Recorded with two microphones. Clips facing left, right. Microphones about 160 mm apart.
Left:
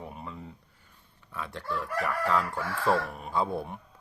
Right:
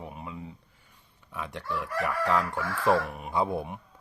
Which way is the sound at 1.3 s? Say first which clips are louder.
Right 1 dB; 15° right (ahead or behind).